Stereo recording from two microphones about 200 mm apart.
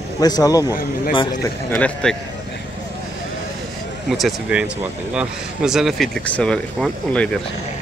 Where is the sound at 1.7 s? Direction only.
5° left (ahead or behind).